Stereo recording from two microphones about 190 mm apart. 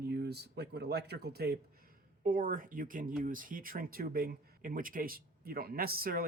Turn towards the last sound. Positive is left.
turn(degrees=-50)  # may be behind; listen again after turning